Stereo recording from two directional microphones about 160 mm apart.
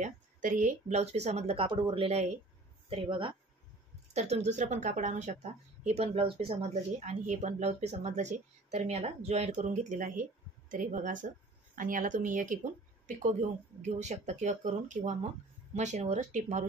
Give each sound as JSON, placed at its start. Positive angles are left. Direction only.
{"t": 0.0, "sound": "a woman's voice", "side_deg": -55}
{"t": 4.1, "sound": "a woman's voice", "side_deg": -40}